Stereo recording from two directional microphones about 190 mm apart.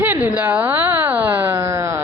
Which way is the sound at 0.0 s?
10° right (ahead or behind).